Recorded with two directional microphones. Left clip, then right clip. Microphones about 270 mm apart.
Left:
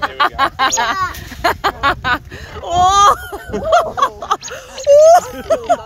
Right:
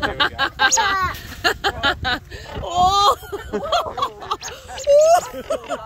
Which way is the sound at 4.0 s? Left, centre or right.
Centre.